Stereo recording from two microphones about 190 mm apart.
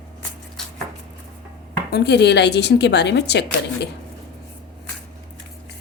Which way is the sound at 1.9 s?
60° left (ahead or behind).